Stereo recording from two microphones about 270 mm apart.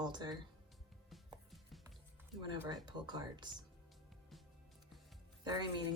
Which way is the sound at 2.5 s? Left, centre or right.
Centre.